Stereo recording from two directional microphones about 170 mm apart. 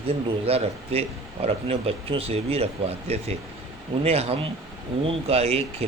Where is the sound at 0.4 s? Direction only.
35° right (ahead or behind).